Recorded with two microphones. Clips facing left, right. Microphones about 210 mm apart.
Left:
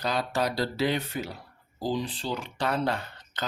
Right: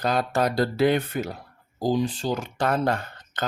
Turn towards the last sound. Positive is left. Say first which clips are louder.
# right 4 dB
turn(degrees=-50)  # may be behind; listen again after turning